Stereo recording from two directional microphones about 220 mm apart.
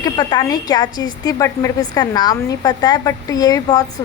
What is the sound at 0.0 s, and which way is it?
A woman's voice, 20° left (ahead or behind).